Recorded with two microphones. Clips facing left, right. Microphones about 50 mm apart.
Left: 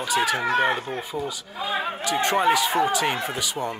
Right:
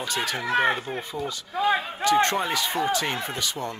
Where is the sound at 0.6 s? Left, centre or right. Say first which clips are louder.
Even; centre.